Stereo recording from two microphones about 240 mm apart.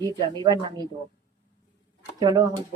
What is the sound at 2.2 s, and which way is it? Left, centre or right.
Speech, centre.